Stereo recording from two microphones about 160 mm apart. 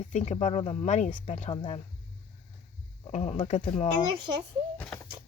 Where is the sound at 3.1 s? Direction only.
40° left (ahead or behind).